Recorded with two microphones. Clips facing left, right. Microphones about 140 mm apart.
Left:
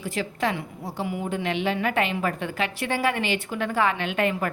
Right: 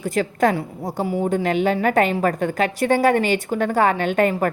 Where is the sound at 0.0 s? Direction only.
45° right (ahead or behind).